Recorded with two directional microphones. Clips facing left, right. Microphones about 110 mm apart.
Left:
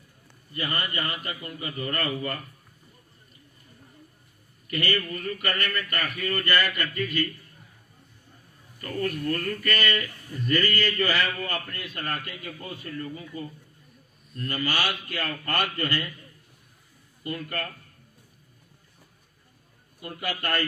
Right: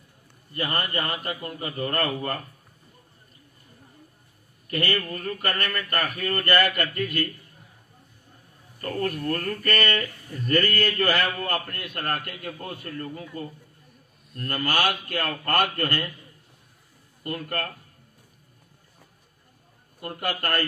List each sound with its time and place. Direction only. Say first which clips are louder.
0.5 s a man's voice: right 3 dB; 45° right (ahead or behind)
4.7 s speech: right 1 dB; 40° right (ahead or behind)
8.8 s speech: right 1 dB; 45° right (ahead or behind)
17.2 s speech: right 2 dB; 50° right (ahead or behind)
20.0 s speech: right 3 dB; 50° right (ahead or behind)